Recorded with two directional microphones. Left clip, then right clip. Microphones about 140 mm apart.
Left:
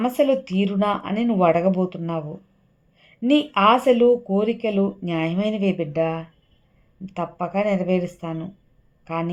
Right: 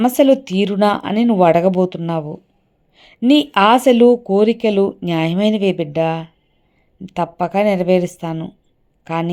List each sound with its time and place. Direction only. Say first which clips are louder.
0.0 s speech: right 7 dB; 30° right (ahead or behind)